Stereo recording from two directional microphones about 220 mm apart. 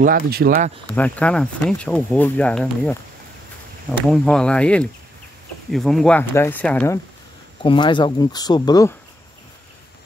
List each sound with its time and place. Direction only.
0.0 s speech: 45° right (ahead or behind)
0.9 s speech: 5° left (ahead or behind)
4.1 s speech: 5° left (ahead or behind)
7.6 s speech: 20° left (ahead or behind)